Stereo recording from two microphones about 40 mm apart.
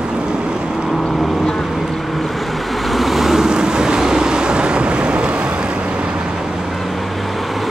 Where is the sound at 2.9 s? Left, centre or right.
Centre; by 5.3 s right.